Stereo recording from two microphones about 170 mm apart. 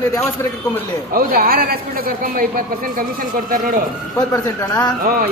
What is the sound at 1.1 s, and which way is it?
A woman's voice, 60° right (ahead or behind).